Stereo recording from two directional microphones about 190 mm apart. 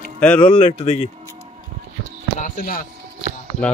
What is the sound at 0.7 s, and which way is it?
Speech, 30° left (ahead or behind).